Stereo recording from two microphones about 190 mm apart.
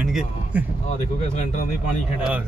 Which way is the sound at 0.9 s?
40° left (ahead or behind).